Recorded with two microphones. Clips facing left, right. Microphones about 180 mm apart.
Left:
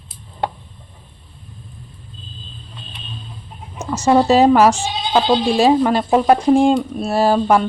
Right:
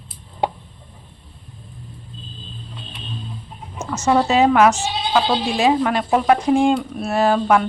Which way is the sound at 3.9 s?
35° left (ahead or behind).